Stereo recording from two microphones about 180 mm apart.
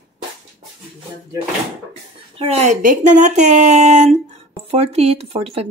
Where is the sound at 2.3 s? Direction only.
35° right (ahead or behind).